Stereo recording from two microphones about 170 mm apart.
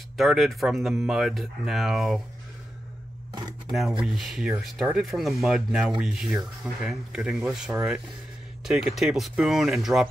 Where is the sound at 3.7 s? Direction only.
Centre (ahead or behind).